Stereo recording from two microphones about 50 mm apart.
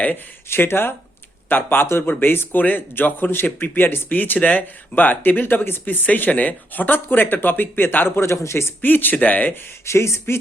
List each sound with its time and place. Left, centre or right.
0.4 s a man's voice: left
8.3 s speech: left
8.8 s a man's voice: left
9.8 s speech: left